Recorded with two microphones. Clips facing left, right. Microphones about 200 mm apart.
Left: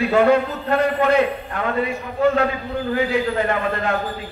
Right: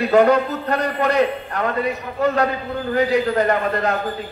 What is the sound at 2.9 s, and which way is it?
A man's voice, 40° right (ahead or behind).